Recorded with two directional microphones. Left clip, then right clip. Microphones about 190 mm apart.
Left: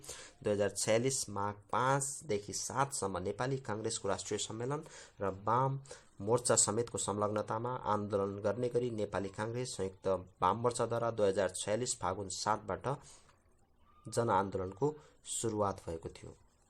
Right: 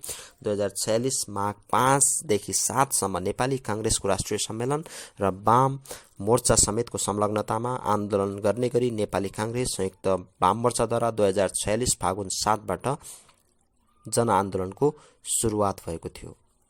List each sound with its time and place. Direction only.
0.0 s a sound: 35° right (ahead or behind)
0.9 s speech: 25° right (ahead or behind)
1.4 s speech: 40° right (ahead or behind)
14.1 s speech: 35° right (ahead or behind)